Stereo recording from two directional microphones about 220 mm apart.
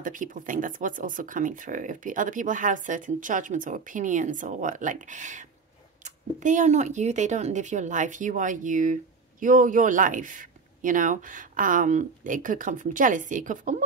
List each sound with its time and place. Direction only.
0.0 s speech: 35° right (ahead or behind)